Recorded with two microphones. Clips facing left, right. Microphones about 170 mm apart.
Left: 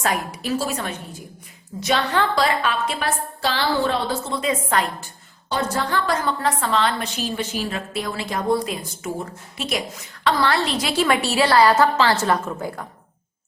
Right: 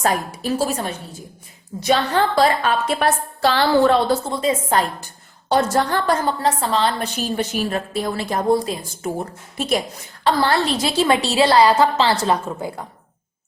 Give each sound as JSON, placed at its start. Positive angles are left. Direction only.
{"t": 0.0, "sound": "a woman's voice", "side_deg": -35}
{"t": 2.3, "sound": "a woman's voice", "side_deg": -50}
{"t": 4.1, "sound": "a woman's voice", "side_deg": -35}
{"t": 5.5, "sound": "a woman's voice", "side_deg": -80}
{"t": 5.7, "sound": "a woman's voice", "side_deg": -45}
{"t": 6.1, "sound": "a woman's voice", "side_deg": -35}
{"t": 7.2, "sound": "a woman's voice", "side_deg": -45}